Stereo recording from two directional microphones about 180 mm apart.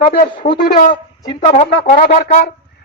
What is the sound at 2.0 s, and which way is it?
Speech, 55° left (ahead or behind).